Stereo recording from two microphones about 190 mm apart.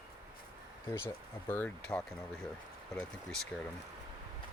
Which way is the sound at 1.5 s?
10° left (ahead or behind).